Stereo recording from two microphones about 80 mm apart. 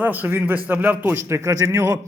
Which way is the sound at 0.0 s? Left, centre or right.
Right.